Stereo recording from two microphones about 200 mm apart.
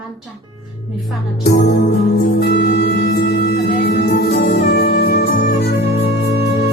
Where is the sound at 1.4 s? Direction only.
55° left (ahead or behind).